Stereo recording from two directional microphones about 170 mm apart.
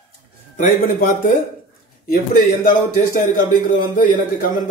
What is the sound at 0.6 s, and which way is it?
A man's voice, 50° left (ahead or behind).